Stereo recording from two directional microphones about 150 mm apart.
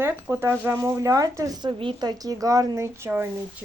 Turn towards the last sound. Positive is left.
turn(degrees=-15)  # may be behind; listen again after turning